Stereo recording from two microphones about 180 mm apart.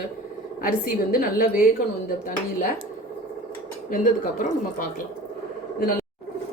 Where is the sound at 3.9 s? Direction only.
50° left (ahead or behind).